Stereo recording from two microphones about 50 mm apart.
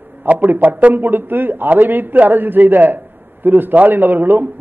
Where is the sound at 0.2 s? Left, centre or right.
Right.